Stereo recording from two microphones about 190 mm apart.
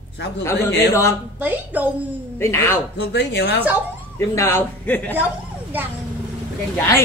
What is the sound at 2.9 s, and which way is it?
Speech, 65° left (ahead or behind).